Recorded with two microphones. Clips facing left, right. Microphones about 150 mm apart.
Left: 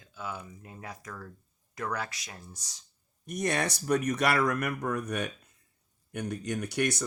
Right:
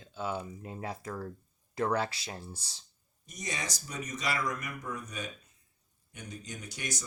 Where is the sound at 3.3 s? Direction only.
60° left (ahead or behind).